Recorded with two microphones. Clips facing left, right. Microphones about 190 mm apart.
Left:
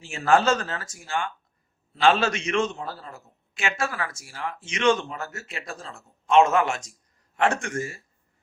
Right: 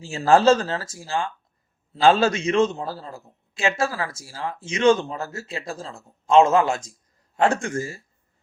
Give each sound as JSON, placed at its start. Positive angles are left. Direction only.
{"t": 0.1, "sound": "a man's voice", "side_deg": -30}